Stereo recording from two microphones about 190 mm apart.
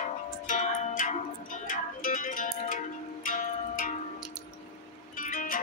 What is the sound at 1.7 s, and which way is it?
Zither, 45° left (ahead or behind).